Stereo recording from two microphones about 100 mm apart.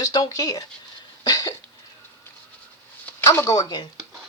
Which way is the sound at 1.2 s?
40° left (ahead or behind).